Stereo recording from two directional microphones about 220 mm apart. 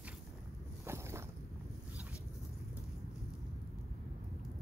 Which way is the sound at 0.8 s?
10° right (ahead or behind).